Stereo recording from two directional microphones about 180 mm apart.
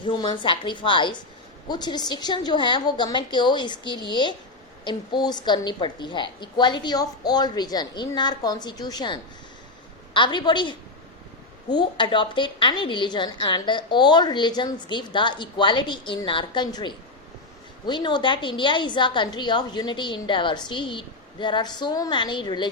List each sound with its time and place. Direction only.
0.0 s a woman's voice: 25° left (ahead or behind)
10.2 s a woman's voice: 25° left (ahead or behind)